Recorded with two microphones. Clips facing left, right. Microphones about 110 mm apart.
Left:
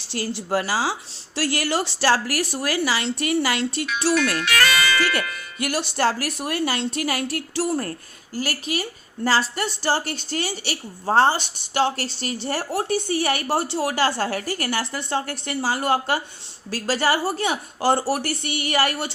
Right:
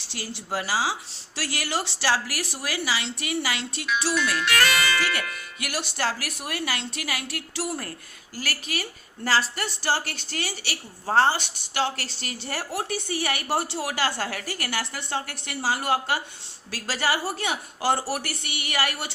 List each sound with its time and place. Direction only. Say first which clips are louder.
0.1 s a woman's voice: left 7 dB; 40° left (ahead or behind)
5.5 s a woman's voice: left 7 dB; 30° left (ahead or behind)